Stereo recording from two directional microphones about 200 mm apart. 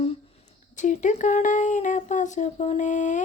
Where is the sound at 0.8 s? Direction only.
40° left (ahead or behind).